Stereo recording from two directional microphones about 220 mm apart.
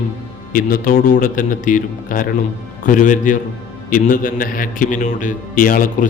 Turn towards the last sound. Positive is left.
turn(degrees=40)  # may be behind; listen again after turning